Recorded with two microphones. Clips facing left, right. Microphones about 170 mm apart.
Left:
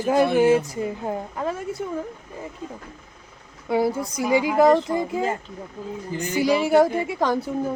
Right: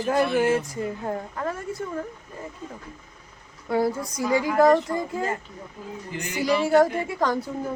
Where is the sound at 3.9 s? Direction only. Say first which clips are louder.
Left 2 dB; 25° left (ahead or behind).